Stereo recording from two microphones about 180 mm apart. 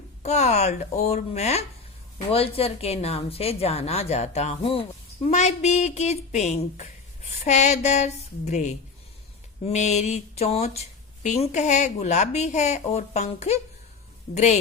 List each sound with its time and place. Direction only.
0.2 s speech: 40° left (ahead or behind)